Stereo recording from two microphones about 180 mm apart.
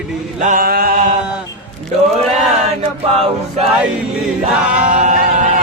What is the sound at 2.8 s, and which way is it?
Speech, 35° right (ahead or behind).